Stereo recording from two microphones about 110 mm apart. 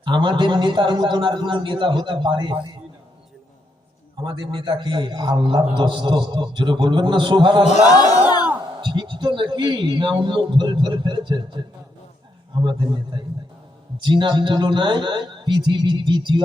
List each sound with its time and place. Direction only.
0.0 s a man's voice: 45° right (ahead or behind)
4.2 s a man's voice: 45° right (ahead or behind)
7.9 s speech: 35° left (ahead or behind)
8.8 s a man's voice: 45° right (ahead or behind)